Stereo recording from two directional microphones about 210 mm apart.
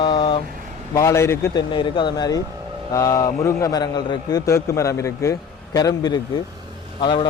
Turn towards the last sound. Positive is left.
turn(degrees=20)  # may be behind; listen again after turning